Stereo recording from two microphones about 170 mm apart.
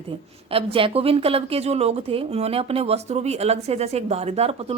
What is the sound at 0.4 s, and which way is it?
A woman's voice, 35° right (ahead or behind).